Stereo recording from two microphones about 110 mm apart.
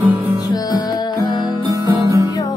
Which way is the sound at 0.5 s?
35° left (ahead or behind).